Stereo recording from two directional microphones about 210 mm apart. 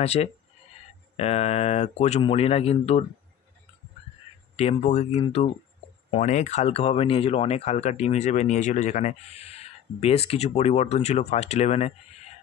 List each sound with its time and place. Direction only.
0.0 s speech: 30° left (ahead or behind)
4.6 s speech: 30° left (ahead or behind)